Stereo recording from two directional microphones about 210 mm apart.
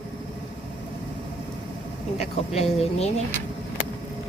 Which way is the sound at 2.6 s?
30° left (ahead or behind).